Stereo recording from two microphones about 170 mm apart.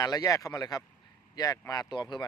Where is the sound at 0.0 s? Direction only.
20° left (ahead or behind).